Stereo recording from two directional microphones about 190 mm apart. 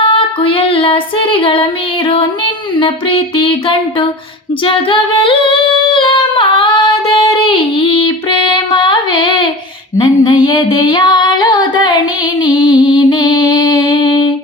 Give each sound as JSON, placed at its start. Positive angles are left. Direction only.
{"t": 0.0, "sound": "female singing", "side_deg": 25}
{"t": 2.0, "sound": "music", "side_deg": 25}
{"t": 4.6, "sound": "singing", "side_deg": 25}
{"t": 7.1, "sound": "female singing", "side_deg": 25}
{"t": 12.4, "sound": "music", "side_deg": 20}